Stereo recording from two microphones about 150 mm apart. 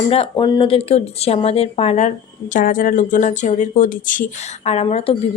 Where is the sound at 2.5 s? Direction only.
65° left (ahead or behind).